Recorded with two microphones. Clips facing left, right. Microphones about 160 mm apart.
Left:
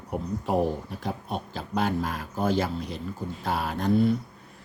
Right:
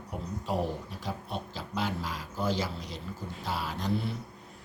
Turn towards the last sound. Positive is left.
turn(degrees=55)  # may be behind; listen again after turning